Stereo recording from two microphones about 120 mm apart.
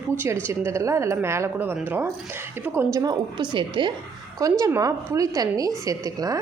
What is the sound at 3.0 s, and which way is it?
Speech, 35° right (ahead or behind).